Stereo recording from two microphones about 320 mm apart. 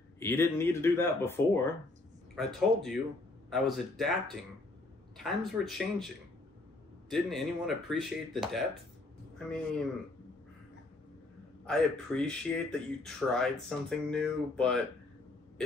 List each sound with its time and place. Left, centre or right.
0.2 s speech: centre
11.6 s speech: centre